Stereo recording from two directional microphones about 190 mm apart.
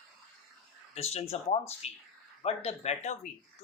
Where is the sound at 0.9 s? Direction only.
35° left (ahead or behind).